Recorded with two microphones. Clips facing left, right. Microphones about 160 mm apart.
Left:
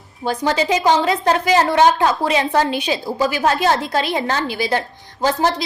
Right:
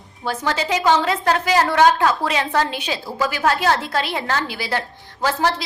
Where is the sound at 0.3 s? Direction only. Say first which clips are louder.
Left 4 dB; 15° left (ahead or behind).